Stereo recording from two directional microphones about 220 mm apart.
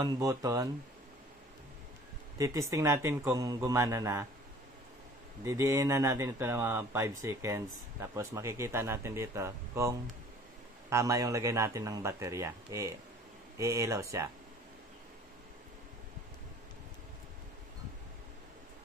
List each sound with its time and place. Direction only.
0.0 s speech: 15° right (ahead or behind)
2.3 s speech: 15° right (ahead or behind)
5.4 s speech: 15° right (ahead or behind)